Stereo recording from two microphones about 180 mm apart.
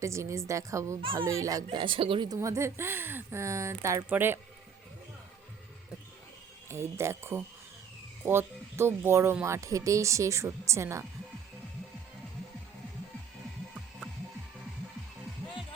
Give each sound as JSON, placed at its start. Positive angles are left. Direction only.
{"t": 0.0, "sound": "speech", "side_deg": -15}
{"t": 6.7, "sound": "speech", "side_deg": -15}